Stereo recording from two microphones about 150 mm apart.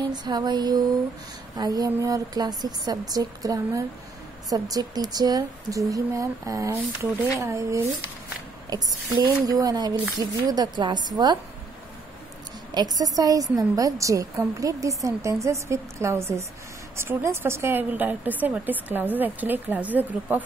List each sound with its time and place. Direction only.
0.1 s a woman's voice: 30° right (ahead or behind)
12.7 s a woman's voice: 25° right (ahead or behind); by 20.4 s 10° right (ahead or behind)